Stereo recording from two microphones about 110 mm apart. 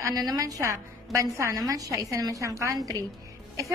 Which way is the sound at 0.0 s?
30° right (ahead or behind).